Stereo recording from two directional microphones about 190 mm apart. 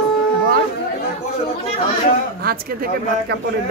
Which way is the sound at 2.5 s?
55° right (ahead or behind).